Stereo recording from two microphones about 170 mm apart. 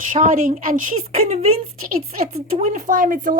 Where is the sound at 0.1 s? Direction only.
50° right (ahead or behind).